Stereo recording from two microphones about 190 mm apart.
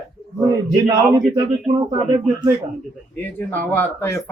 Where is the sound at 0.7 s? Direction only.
20° right (ahead or behind).